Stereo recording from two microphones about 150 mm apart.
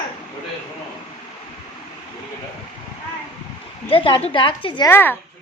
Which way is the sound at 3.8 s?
35° left (ahead or behind).